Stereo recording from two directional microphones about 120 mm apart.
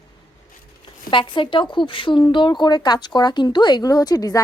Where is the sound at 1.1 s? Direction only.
45° left (ahead or behind).